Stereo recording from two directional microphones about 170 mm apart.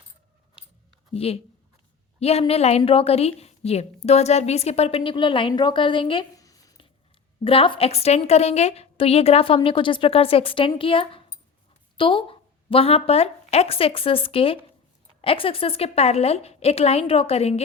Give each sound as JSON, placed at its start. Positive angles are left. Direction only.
{"t": 1.1, "sound": "a woman's voice", "side_deg": 35}
{"t": 6.4, "sound": "a sound", "side_deg": 20}
{"t": 7.4, "sound": "a woman's voice", "side_deg": 30}